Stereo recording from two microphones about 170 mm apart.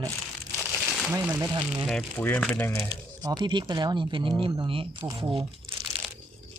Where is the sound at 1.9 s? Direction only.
10° left (ahead or behind).